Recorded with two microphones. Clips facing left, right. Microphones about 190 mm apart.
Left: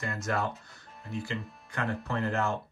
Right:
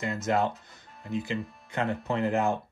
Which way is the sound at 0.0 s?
20° right (ahead or behind).